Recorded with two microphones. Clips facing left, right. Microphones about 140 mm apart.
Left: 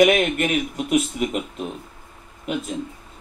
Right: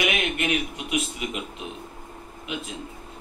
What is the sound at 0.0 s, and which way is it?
A man's voice, 40° left (ahead or behind).